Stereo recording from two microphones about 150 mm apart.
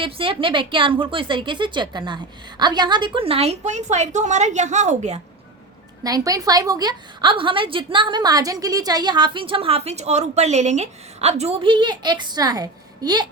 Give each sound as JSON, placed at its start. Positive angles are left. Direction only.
{"t": 0.0, "sound": "a woman's voice", "side_deg": -35}
{"t": 6.0, "sound": "a woman's voice", "side_deg": -25}